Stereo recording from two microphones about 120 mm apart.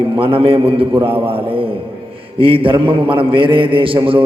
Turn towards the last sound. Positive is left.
turn(degrees=-45)  # may be behind; listen again after turning